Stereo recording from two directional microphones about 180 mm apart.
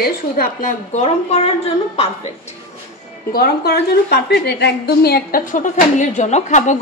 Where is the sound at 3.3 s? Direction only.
60° left (ahead or behind).